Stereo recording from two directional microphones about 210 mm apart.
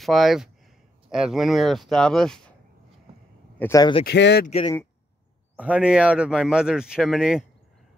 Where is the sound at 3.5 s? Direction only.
15° left (ahead or behind).